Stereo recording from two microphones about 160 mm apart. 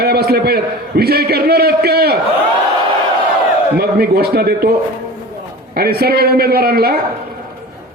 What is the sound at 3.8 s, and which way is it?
Speech, 80° right.